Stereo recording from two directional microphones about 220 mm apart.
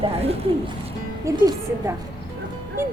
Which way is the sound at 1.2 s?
15° right (ahead or behind).